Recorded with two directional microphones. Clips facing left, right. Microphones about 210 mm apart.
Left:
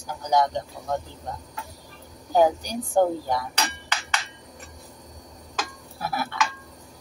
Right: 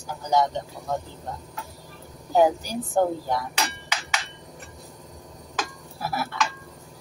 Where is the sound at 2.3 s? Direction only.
5° right (ahead or behind).